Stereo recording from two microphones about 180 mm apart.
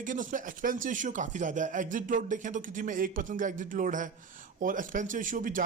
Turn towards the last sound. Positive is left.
turn(degrees=-50)  # may be behind; listen again after turning